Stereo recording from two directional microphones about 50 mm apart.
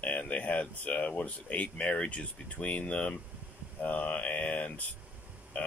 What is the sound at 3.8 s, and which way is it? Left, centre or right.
Mantra, left.